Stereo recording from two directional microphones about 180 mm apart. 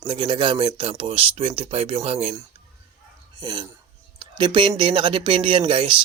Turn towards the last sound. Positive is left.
turn(degrees=-30)  # may be behind; listen again after turning